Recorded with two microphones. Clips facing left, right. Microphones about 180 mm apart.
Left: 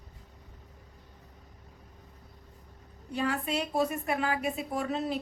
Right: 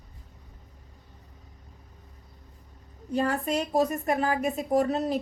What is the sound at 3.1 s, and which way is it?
A woman's voice, 40° right (ahead or behind).